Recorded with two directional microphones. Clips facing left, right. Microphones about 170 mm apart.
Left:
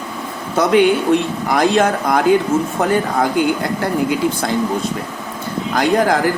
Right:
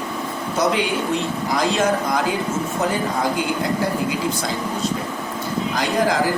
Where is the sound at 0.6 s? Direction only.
60° left (ahead or behind).